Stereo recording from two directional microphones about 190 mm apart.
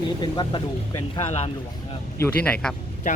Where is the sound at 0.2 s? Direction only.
25° left (ahead or behind).